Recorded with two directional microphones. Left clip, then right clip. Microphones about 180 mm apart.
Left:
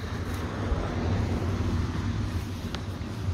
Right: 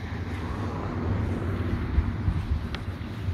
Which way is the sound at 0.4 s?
50° right (ahead or behind).